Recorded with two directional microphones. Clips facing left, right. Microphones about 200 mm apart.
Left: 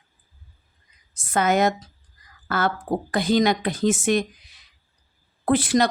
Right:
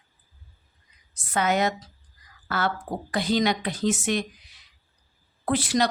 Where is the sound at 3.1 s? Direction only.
50° left (ahead or behind).